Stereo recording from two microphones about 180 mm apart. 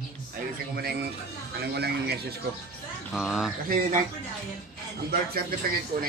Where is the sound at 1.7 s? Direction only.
60° right (ahead or behind).